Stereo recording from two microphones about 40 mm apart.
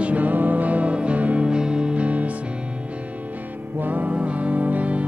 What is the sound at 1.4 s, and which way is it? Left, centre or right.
Music, right.